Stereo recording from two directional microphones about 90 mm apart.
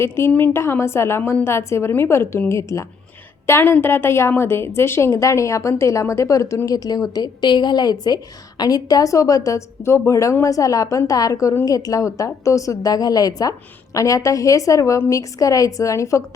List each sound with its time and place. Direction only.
0.0 s a woman's voice: 25° left (ahead or behind)